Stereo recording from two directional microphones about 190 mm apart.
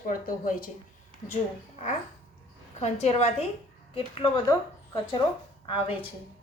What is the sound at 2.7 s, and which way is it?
A woman's voice, 35° left (ahead or behind).